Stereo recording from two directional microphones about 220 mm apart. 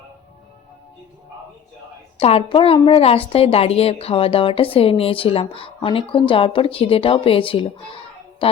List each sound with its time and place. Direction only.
2.1 s a woman's voice: 25° left (ahead or behind)